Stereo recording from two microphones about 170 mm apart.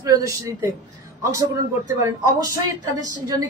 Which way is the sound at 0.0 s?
20° right (ahead or behind).